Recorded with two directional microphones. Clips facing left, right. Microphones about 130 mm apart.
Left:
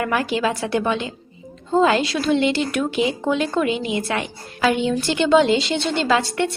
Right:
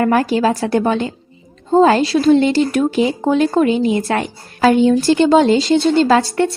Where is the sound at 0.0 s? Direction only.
40° right (ahead or behind).